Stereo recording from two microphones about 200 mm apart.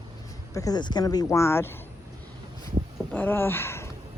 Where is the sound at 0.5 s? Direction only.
20° left (ahead or behind).